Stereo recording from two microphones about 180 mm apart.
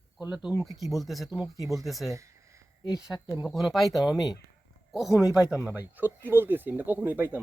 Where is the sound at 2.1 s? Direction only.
15° right (ahead or behind).